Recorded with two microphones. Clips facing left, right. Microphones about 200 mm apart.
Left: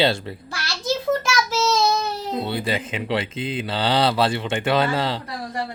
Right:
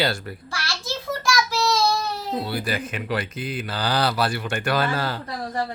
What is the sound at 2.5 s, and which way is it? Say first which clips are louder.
Speech: left 2 dB; 25° left (ahead or behind).